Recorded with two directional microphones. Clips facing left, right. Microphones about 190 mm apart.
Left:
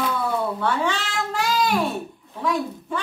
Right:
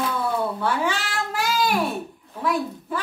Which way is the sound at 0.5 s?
10° right (ahead or behind).